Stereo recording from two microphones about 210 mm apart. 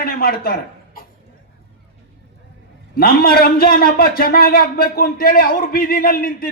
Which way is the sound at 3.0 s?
45° left (ahead or behind).